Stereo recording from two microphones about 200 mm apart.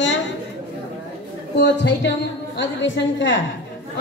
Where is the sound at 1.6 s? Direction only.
60° left (ahead or behind).